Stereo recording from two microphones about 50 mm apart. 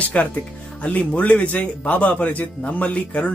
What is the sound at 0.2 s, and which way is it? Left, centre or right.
Speech, left.